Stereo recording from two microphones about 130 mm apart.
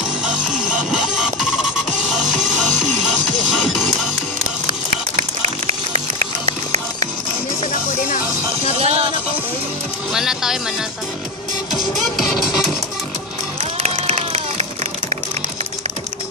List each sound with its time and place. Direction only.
0.2 s music: 5° right (ahead or behind)
5.7 s music: 60° right (ahead or behind)
8.7 s music: 50° right (ahead or behind)
10.1 s music: 5° right (ahead or behind)
11.7 s music: centre (ahead or behind)
14.0 s run: 55° right (ahead or behind)